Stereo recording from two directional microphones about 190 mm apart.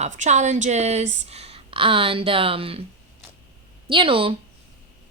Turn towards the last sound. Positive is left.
turn(degrees=-30)  # may be behind; listen again after turning